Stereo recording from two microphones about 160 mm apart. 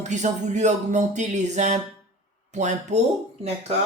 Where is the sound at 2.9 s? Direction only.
45° right (ahead or behind).